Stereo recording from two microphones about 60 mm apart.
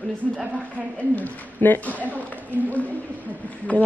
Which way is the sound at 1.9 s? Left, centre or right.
Right.